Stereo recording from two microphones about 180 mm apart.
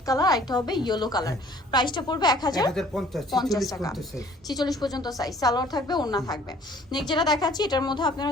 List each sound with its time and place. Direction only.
0.0 s a woman's voice: 20° left (ahead or behind)
2.7 s speech: centre (ahead or behind)
3.7 s a woman's voice: 20° left (ahead or behind)